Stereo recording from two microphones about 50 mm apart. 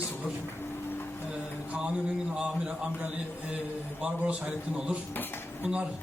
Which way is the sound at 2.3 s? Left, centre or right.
Right.